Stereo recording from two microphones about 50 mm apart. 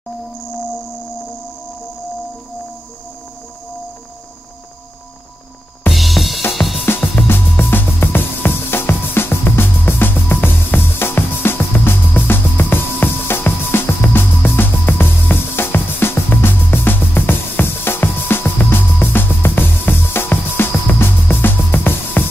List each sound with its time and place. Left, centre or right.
5.9 s music: centre
6.5 s drum kit: centre
7.2 s music: left